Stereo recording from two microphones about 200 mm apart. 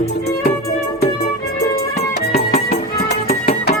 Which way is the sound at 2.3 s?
50° left (ahead or behind).